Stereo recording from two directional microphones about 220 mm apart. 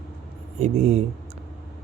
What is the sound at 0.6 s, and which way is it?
Speech, 30° right (ahead or behind).